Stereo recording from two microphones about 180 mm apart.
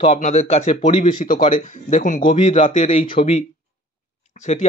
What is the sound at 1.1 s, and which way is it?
Speech, 50° left (ahead or behind).